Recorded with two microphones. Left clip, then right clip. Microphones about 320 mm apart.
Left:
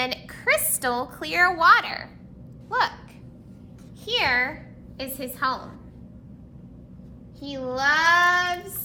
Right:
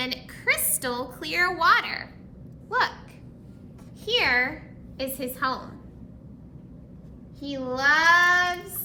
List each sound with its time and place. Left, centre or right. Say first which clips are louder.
0.0 s a sound: left 2 dB; centre
2.6 s dog: left 1 dB; centre
4.0 s child singing: even; centre
7.3 s child singing: left 1 dB; centre